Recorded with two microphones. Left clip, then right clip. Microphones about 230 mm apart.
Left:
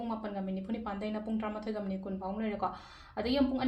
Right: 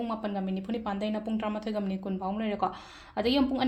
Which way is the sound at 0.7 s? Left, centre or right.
Right.